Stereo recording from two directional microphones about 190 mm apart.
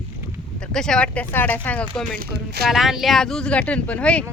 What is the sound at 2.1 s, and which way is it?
Speech, 50° right (ahead or behind).